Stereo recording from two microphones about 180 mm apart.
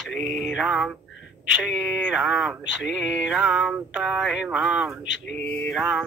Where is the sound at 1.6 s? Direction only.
5° right (ahead or behind).